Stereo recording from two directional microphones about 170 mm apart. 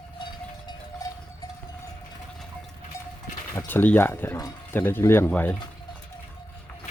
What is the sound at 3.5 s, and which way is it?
Speech, 10° left (ahead or behind).